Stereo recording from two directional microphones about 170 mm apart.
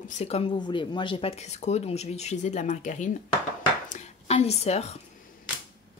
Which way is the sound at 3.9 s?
40° left (ahead or behind).